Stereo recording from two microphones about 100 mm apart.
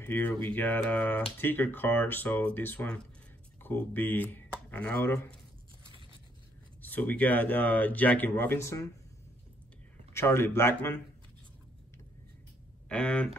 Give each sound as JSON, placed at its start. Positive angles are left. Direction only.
{"t": 0.0, "sound": "speech", "side_deg": 20}
{"t": 6.8, "sound": "speech", "side_deg": 15}
{"t": 10.1, "sound": "speech", "side_deg": 25}
{"t": 12.8, "sound": "speech", "side_deg": 10}